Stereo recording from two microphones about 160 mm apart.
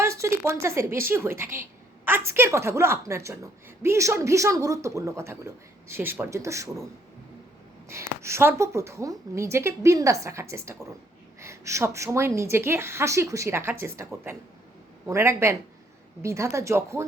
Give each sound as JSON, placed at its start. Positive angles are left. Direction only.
{"t": 0.0, "sound": "a woman's voice", "side_deg": -20}
{"t": 7.9, "sound": "a woman's voice", "side_deg": -15}